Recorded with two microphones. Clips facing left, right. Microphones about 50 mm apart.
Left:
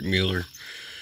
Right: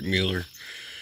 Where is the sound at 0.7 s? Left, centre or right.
Centre.